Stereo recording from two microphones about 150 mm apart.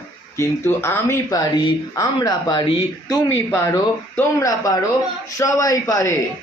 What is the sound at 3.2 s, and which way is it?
Speech, 15° left (ahead or behind).